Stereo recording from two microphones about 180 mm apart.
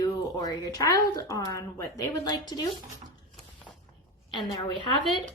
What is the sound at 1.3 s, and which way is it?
Speech, 20° left (ahead or behind).